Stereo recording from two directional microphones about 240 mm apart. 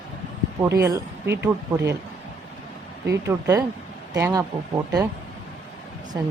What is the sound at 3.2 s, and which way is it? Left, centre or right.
Speech, centre.